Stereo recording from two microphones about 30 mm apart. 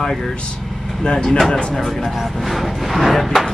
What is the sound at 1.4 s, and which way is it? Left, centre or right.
Speech, left.